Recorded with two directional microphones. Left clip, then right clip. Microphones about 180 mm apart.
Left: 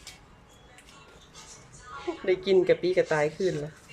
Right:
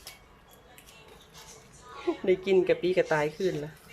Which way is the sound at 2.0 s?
10° right (ahead or behind).